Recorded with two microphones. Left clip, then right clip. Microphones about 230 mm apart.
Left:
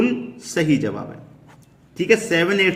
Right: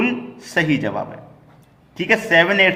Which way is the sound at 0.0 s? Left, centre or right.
Centre.